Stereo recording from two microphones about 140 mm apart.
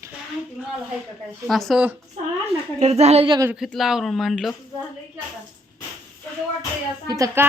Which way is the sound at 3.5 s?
Centre (ahead or behind).